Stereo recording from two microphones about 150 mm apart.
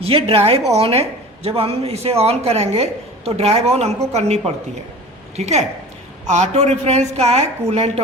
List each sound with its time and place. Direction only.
0.0 s a woman's voice: 40° right (ahead or behind)